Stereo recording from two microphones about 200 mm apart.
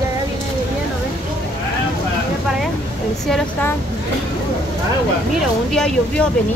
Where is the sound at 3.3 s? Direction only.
Centre (ahead or behind).